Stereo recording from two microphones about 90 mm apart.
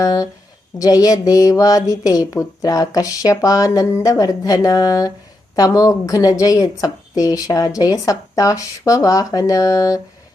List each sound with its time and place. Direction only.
0.0 s speech: 40° left (ahead or behind)